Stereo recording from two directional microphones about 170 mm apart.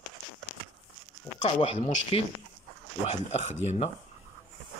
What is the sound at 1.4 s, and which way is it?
Speech, 40° left (ahead or behind).